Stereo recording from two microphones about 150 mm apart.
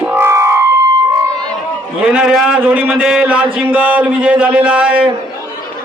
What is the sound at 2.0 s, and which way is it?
Speech, 5° right (ahead or behind).